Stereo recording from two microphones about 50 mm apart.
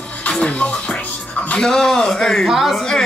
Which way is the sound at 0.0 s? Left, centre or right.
Left.